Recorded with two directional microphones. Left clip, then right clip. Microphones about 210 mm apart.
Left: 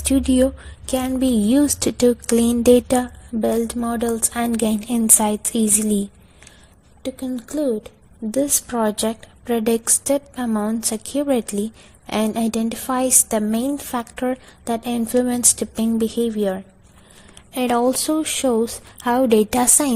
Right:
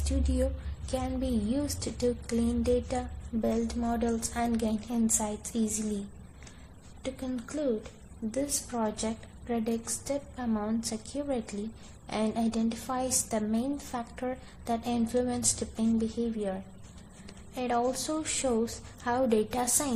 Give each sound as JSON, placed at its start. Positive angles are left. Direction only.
{"t": 0.9, "sound": "speech", "side_deg": 45}
{"t": 7.0, "sound": "speech", "side_deg": 35}